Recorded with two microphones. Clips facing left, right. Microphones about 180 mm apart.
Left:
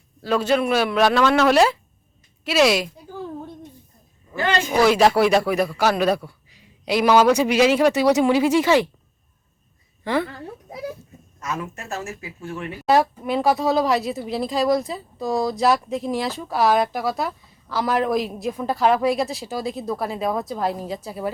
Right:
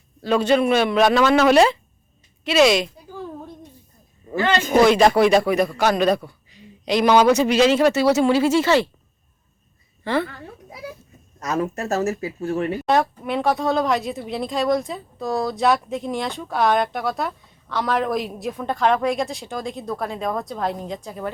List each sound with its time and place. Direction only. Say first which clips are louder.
0.2 s speech: right 2 dB; centre (ahead or behind)
4.7 s speech: right 2 dB; 5° left (ahead or behind)
6.2 s a sound: right 2 dB; 5° left (ahead or behind)
7.3 s speech: right 1 dB; 10° left (ahead or behind)
10.0 s a woman's voice: even; 10° left (ahead or behind)
11.3 s speech: right 6 dB; 40° right (ahead or behind)
12.8 s speech: left 7 dB; 5° left (ahead or behind)